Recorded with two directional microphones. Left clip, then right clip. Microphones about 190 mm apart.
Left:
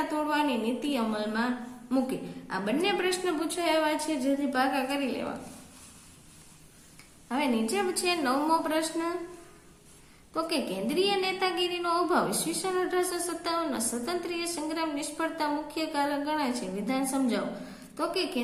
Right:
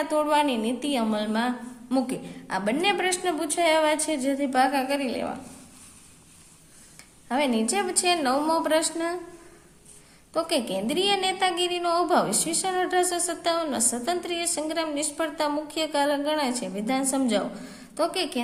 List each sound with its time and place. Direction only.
0.1 s a woman's voice: 40° right (ahead or behind)
7.3 s a woman's voice: 35° right (ahead or behind)
10.3 s a woman's voice: 35° right (ahead or behind)